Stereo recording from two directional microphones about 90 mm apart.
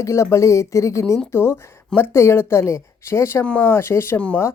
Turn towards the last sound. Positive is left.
turn(degrees=25)  # may be behind; listen again after turning